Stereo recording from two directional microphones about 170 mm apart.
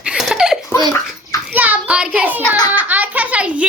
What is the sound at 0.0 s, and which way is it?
Belly laugh, 5° right (ahead or behind).